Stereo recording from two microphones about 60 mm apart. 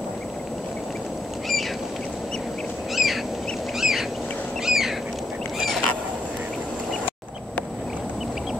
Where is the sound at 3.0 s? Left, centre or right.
Centre.